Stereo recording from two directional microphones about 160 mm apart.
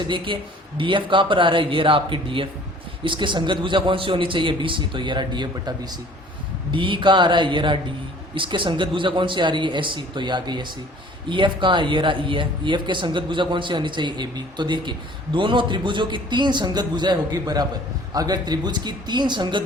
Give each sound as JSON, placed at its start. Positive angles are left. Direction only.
{"t": 0.3, "sound": "a man's voice", "side_deg": -30}